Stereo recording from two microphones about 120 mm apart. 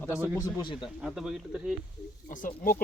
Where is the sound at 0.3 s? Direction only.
35° left (ahead or behind).